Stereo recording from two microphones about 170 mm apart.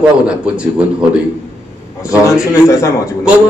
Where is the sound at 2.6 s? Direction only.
20° left (ahead or behind).